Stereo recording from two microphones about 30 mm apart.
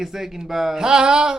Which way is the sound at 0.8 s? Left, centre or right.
Right.